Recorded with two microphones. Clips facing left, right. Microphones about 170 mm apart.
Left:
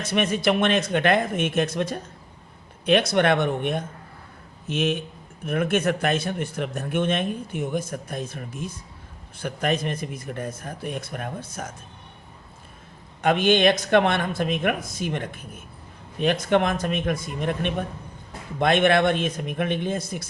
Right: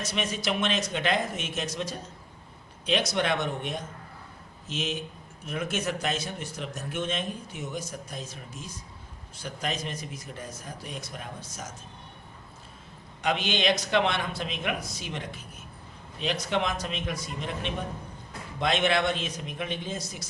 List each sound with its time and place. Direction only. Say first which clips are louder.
0.0 s a man's voice: left 8 dB; 55° left (ahead or behind)
13.2 s a man's voice: left 8 dB; 50° left (ahead or behind)